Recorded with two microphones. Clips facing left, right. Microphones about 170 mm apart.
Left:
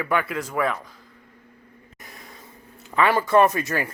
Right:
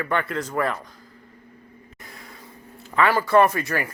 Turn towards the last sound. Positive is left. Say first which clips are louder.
# even
turn(degrees=20)  # may be behind; listen again after turning